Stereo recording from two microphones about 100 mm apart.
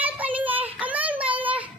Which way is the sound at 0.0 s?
15° right (ahead or behind).